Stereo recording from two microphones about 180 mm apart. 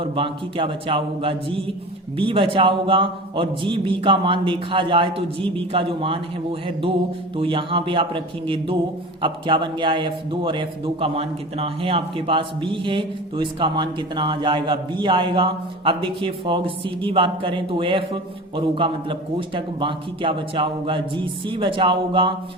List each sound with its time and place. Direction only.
0.0 s a man's voice: 30° right (ahead or behind)